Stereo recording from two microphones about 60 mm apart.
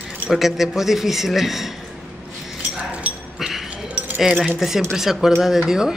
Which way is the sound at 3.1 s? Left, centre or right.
Centre.